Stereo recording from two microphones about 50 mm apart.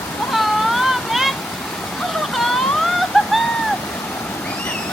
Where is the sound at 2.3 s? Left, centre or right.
Centre.